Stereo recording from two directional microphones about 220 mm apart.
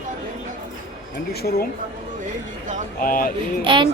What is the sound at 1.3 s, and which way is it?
Speech, 45° left (ahead or behind).